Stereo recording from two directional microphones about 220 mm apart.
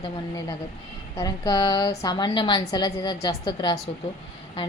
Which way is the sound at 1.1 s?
15° left (ahead or behind).